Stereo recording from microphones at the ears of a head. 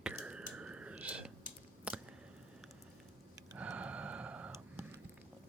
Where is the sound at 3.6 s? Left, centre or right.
Right.